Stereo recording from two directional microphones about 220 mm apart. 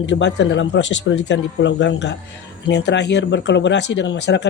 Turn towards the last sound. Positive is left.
turn(degrees=55)  # may be behind; listen again after turning